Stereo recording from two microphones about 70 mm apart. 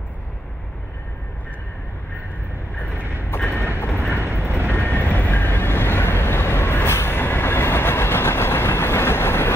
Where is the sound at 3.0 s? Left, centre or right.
Right.